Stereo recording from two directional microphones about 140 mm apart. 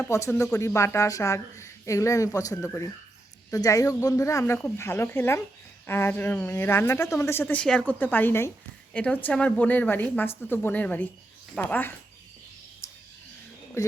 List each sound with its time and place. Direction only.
0.0 s speech: 20° left (ahead or behind)
13.8 s speech: 20° left (ahead or behind)